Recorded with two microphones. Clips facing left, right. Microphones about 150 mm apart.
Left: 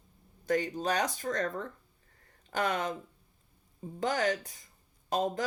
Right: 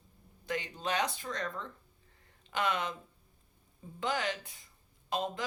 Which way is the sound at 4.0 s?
45° left (ahead or behind).